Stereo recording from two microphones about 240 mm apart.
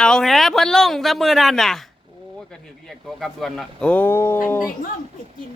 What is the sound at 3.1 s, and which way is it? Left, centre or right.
A man's voice, centre.